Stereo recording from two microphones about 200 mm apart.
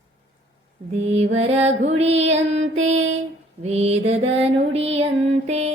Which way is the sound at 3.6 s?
30° right (ahead or behind).